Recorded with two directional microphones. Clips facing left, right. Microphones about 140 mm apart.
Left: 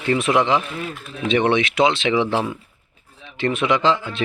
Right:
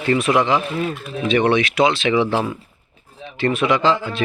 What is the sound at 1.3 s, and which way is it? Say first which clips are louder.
Speech: right 1 dB; 20° left (ahead or behind).